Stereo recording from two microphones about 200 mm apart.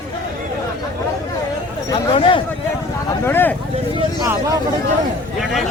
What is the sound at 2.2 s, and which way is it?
Speech, 25° left (ahead or behind).